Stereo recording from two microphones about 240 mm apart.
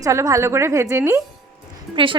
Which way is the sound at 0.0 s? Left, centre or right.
Centre.